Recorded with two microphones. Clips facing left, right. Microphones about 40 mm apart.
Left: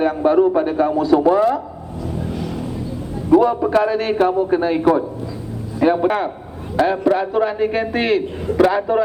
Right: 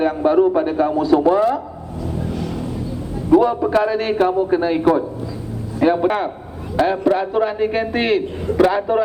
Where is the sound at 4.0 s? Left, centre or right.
Left.